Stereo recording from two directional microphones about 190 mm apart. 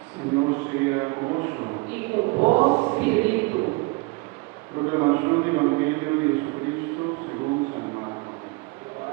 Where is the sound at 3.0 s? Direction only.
10° right (ahead or behind).